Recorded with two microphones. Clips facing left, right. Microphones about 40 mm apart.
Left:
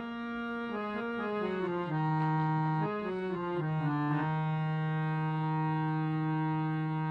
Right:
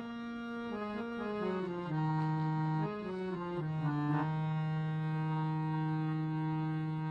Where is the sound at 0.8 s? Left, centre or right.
Left.